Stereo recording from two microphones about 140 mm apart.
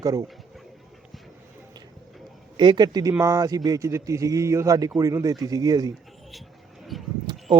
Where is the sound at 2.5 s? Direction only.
30° right (ahead or behind).